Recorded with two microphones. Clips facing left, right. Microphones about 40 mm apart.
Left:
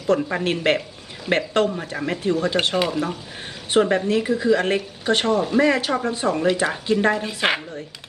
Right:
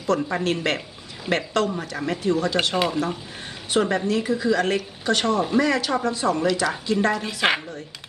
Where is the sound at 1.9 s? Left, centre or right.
Centre.